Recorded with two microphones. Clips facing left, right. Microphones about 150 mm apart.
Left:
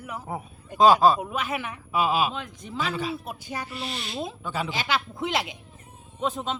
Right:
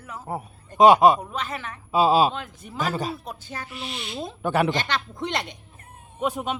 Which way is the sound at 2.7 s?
45° right (ahead or behind).